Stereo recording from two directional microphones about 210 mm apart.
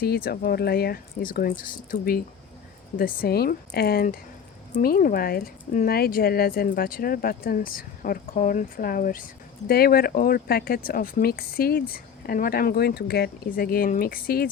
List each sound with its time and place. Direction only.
0.0 s speech: 50° left (ahead or behind)